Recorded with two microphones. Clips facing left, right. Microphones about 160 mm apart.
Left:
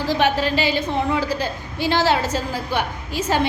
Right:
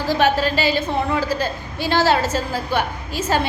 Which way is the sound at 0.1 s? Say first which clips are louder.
Right 2 dB; 15° left (ahead or behind).